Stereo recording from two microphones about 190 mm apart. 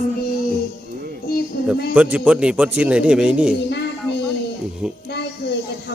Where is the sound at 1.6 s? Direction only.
55° left (ahead or behind).